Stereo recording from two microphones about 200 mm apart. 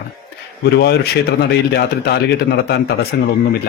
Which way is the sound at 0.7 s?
55° left (ahead or behind).